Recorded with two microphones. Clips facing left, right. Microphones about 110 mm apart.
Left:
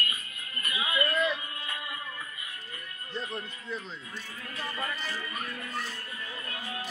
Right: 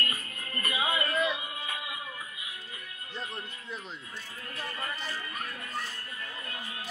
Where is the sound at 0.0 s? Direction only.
40° right (ahead or behind); by 2.0 s 10° right (ahead or behind).